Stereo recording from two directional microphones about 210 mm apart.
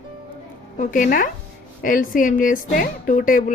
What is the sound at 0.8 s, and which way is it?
A woman's voice, 40° left (ahead or behind).